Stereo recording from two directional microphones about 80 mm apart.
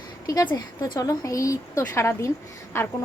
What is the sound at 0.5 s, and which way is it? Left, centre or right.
A woman's voice, left.